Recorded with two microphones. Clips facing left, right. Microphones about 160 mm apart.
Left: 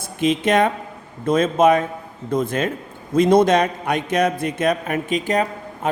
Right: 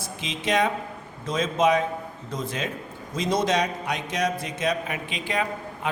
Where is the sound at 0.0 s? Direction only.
55° left (ahead or behind).